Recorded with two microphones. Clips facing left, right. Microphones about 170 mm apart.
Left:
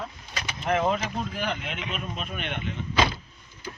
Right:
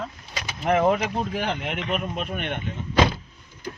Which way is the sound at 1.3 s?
75° right (ahead or behind).